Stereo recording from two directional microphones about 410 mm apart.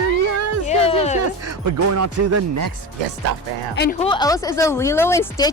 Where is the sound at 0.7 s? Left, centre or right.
Centre.